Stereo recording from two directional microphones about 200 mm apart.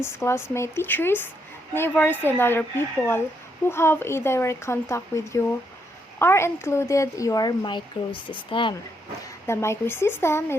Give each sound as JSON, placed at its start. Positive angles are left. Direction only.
{"t": 0.0, "sound": "speech", "side_deg": 15}
{"t": 9.5, "sound": "speech", "side_deg": 15}